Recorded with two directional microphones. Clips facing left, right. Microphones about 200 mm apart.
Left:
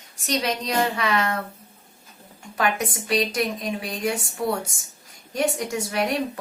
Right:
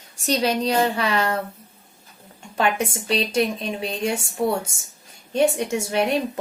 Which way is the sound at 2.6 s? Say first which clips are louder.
Right 2 dB; 25° right (ahead or behind).